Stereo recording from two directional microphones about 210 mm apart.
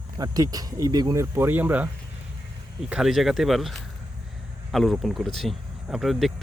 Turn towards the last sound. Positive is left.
turn(degrees=0)  # may be behind; listen again after turning